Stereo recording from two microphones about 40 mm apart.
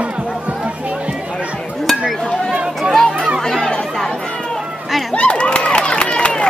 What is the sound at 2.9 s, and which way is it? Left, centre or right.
Chatter, centre.